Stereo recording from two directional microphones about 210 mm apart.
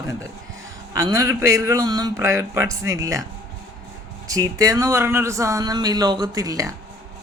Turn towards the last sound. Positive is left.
turn(degrees=-15)  # may be behind; listen again after turning